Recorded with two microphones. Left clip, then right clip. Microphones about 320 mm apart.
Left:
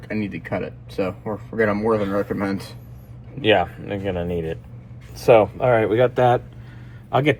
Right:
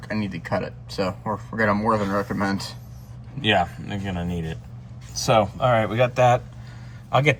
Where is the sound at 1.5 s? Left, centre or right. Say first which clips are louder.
Left 2 dB; right.